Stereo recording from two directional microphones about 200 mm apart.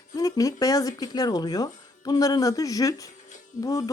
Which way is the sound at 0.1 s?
15° left (ahead or behind).